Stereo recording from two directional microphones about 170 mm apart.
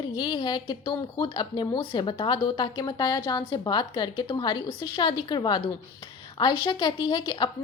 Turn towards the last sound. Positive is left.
turn(degrees=25)  # may be behind; listen again after turning